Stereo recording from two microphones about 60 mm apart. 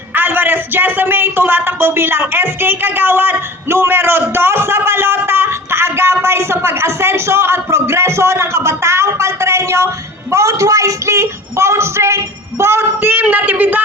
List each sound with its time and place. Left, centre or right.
0.1 s a man's voice: right